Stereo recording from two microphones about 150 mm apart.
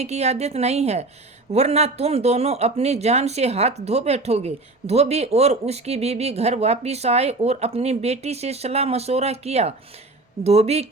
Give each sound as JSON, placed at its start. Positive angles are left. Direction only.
{"t": 0.0, "sound": "speech", "side_deg": -45}